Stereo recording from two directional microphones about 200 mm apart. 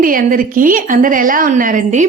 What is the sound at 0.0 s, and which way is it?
A woman's voice, 45° right (ahead or behind).